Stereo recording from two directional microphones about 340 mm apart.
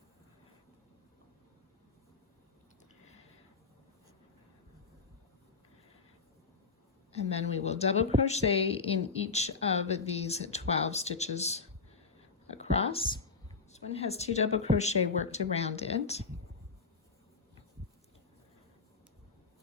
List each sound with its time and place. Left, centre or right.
7.1 s a woman's voice: centre
12.5 s a sound: centre
13.7 s speech: centre